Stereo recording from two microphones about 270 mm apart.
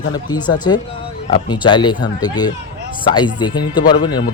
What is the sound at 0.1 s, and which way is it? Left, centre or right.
Speech, centre.